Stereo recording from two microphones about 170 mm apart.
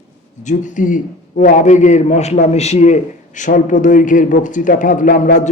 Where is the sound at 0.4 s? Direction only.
50° left (ahead or behind).